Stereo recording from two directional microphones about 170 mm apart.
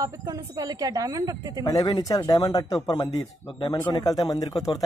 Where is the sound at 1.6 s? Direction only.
25° left (ahead or behind).